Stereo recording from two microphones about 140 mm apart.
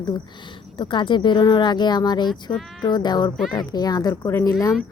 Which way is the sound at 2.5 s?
Centre (ahead or behind).